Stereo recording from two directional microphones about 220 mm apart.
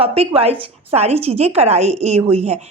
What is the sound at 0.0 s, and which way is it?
A woman's voice, 25° right (ahead or behind).